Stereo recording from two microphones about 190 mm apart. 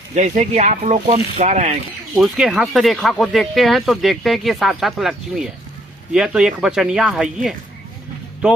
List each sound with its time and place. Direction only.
0.1 s speech: 40° right (ahead or behind)
2.1 s speech: centre (ahead or behind)
8.4 s speech: 10° right (ahead or behind)